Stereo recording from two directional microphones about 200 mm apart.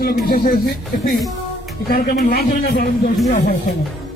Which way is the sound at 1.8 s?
45° left (ahead or behind).